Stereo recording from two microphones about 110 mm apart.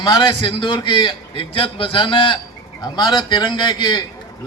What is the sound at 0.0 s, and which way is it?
A man's voice, 40° left (ahead or behind).